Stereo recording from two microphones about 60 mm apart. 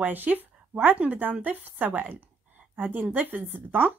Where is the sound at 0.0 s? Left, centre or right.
Right.